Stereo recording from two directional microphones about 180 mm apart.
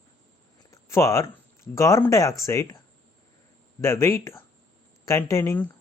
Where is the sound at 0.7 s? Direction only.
15° left (ahead or behind).